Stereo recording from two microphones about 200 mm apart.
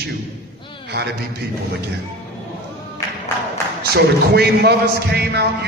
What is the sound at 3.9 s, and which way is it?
A man's voice, 55° right (ahead or behind).